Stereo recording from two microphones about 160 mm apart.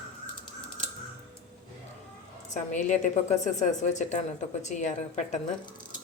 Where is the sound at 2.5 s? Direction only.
50° left (ahead or behind).